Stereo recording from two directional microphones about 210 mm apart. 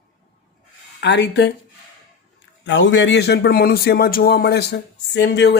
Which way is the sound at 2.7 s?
60° left (ahead or behind).